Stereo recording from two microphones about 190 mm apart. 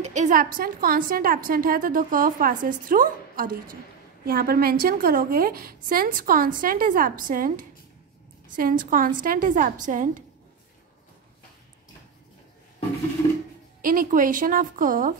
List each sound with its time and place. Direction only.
0.0 s a woman's voice: 40° right (ahead or behind)
13.7 s a woman's voice: 45° right (ahead or behind)